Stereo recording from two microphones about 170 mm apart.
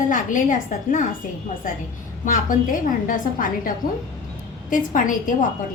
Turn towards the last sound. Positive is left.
turn(degrees=50)  # may be behind; listen again after turning